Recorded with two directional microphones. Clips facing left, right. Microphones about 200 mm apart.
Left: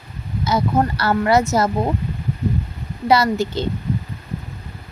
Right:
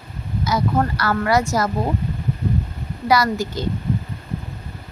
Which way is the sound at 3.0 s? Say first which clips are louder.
Left 2 dB; 25° left (ahead or behind).